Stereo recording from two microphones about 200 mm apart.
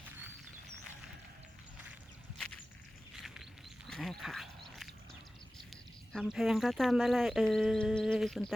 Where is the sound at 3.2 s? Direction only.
Centre (ahead or behind).